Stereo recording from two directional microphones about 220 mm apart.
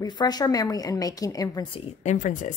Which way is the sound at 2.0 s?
35° left (ahead or behind).